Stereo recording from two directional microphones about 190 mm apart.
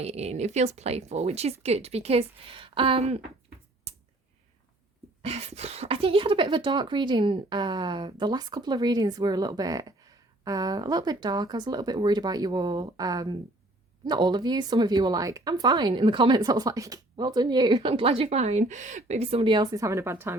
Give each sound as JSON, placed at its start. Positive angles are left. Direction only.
{"t": 0.0, "sound": "speech", "side_deg": -35}
{"t": 3.9, "sound": "clicking", "side_deg": -35}
{"t": 5.2, "sound": "speech", "side_deg": -35}